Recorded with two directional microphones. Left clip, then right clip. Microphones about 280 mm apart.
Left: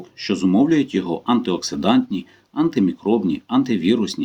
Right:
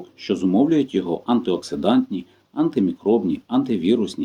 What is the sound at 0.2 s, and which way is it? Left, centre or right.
Speech, left.